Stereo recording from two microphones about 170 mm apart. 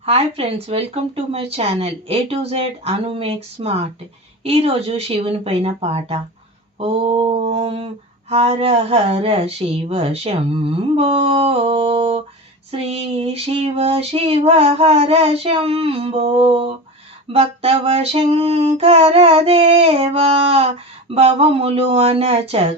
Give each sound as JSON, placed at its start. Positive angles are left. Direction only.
{"t": 0.0, "sound": "female singing", "side_deg": -35}